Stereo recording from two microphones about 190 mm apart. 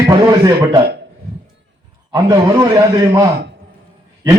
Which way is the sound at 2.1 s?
20° right (ahead or behind).